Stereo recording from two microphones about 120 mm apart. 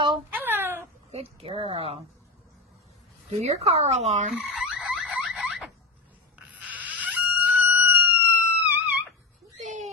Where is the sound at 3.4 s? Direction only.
60° right (ahead or behind).